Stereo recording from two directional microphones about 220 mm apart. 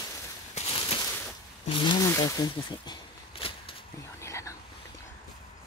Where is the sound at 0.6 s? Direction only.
25° left (ahead or behind).